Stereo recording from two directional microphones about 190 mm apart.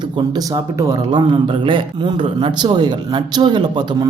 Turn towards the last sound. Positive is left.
turn(degrees=-20)  # may be behind; listen again after turning